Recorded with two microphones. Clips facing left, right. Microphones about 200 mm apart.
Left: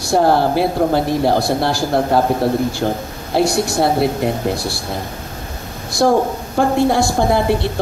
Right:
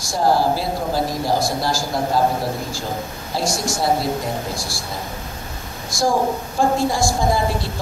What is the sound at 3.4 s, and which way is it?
A man's voice, 65° left (ahead or behind).